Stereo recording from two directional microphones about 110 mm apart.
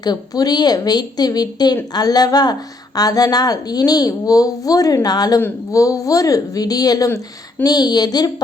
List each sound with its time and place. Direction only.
0.0 s a woman's voice: 35° left (ahead or behind)